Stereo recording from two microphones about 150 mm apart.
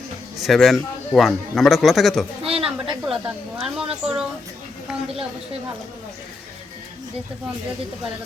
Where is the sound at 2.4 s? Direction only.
40° right (ahead or behind).